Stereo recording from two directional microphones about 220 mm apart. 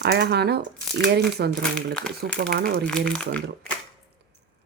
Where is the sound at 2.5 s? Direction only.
45° right (ahead or behind).